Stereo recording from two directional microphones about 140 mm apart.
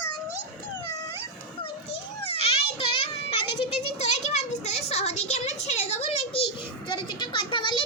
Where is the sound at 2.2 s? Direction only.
45° left (ahead or behind).